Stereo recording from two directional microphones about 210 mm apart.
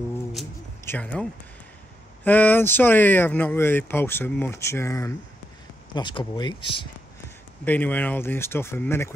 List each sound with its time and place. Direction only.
0.8 s speech: 5° left (ahead or behind)
2.2 s speech: 10° left (ahead or behind)
7.6 s speech: 10° left (ahead or behind)